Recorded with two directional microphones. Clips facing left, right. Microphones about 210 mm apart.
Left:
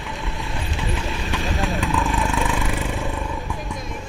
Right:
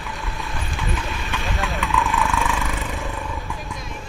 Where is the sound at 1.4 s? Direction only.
Centre (ahead or behind).